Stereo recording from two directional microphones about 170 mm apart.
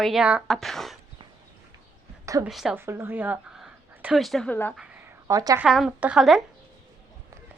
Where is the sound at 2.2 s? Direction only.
20° right (ahead or behind).